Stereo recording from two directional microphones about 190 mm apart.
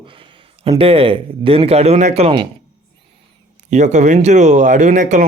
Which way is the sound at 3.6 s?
40° right (ahead or behind).